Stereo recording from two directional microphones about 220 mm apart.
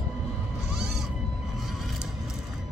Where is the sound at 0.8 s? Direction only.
Centre (ahead or behind).